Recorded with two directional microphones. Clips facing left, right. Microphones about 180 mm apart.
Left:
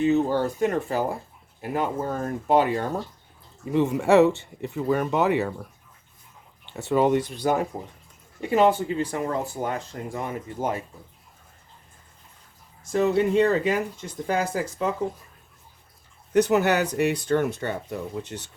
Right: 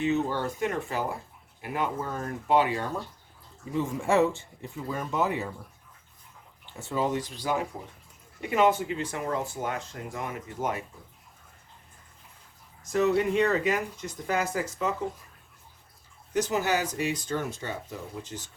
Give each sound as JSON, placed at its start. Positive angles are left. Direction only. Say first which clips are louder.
{"t": 0.0, "sound": "speech", "louder": "left 6 dB", "side_deg": 40}
{"t": 3.7, "sound": "speech", "louder": "left 7 dB", "side_deg": 70}
{"t": 6.7, "sound": "speech", "louder": "left 8 dB", "side_deg": 70}
{"t": 8.4, "sound": "speech", "louder": "left 4 dB", "side_deg": 35}
{"t": 12.8, "sound": "speech", "louder": "left 3 dB", "side_deg": 30}
{"t": 16.3, "sound": "speech", "louder": "left 7 dB", "side_deg": 65}